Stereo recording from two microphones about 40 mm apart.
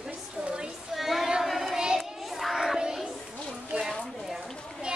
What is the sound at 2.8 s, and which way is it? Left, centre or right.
Child singing, centre.